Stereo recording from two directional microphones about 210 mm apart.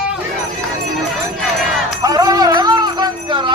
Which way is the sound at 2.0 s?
15° right (ahead or behind).